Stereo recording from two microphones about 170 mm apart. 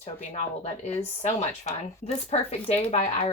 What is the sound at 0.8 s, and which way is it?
Speech, 40° left (ahead or behind).